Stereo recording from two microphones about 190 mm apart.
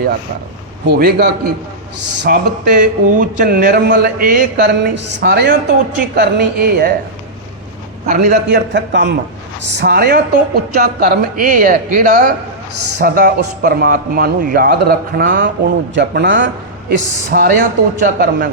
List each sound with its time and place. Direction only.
0.9 s speech: 55° right (ahead or behind)
8.0 s a man's voice: 45° right (ahead or behind); by 16.5 s 70° right (ahead or behind)
16.9 s speech: 55° right (ahead or behind)